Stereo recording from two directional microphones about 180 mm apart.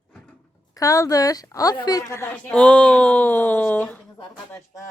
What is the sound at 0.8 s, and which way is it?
A woman's voice, 20° left (ahead or behind).